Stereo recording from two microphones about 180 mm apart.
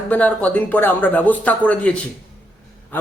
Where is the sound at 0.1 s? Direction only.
5° left (ahead or behind).